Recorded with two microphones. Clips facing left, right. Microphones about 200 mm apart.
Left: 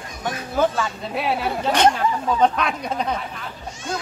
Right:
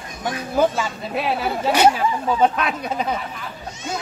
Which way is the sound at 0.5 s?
10° right (ahead or behind).